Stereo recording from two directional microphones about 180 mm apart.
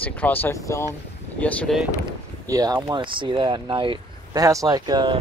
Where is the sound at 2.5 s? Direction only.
20° right (ahead or behind).